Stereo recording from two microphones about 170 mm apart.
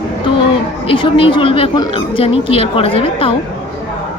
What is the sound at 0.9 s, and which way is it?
A woman's voice, 30° left (ahead or behind).